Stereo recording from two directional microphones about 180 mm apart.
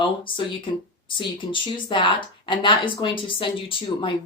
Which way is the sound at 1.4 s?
25° left (ahead or behind).